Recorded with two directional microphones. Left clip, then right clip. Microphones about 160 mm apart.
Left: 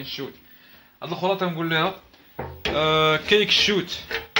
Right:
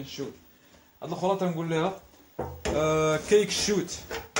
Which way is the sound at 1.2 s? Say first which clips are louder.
Left 3 dB; 15° left (ahead or behind).